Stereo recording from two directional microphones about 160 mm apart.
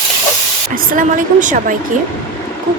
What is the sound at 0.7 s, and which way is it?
Speech, 55° right (ahead or behind).